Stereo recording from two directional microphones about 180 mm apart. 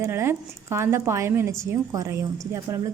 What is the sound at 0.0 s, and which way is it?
A woman's voice, 15° right (ahead or behind).